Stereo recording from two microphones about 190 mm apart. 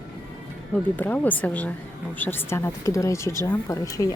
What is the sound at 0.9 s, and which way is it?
Speech, 10° left (ahead or behind).